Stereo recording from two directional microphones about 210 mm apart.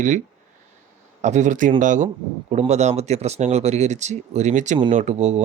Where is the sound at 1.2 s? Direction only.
35° right (ahead or behind).